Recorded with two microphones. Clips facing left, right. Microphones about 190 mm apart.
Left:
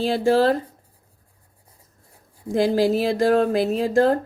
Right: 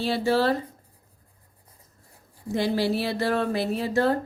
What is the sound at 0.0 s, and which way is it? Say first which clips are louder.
Speech: left 5 dB; 50° left (ahead or behind).